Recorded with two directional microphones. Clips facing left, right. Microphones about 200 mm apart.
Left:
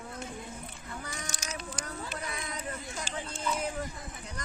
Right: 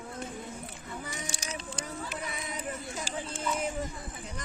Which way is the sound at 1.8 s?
5° right (ahead or behind).